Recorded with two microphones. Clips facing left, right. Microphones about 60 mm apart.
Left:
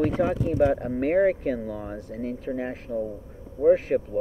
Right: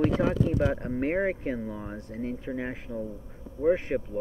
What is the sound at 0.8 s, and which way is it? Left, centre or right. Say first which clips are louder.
Speech: left 6 dB; centre.